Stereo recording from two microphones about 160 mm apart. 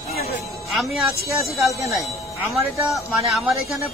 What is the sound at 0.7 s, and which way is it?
A man's voice, centre (ahead or behind).